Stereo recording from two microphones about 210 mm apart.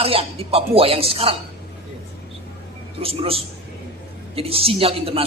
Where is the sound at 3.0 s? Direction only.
25° right (ahead or behind).